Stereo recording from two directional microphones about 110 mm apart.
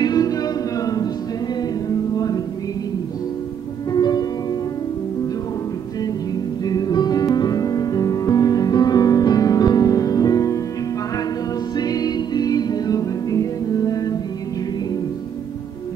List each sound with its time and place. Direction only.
0.0 s a capella: 35° left (ahead or behind)
2.1 s music: 35° left (ahead or behind)
3.9 s music: 40° left (ahead or behind)
6.6 s music: 35° left (ahead or behind)
11.7 s music: 35° left (ahead or behind)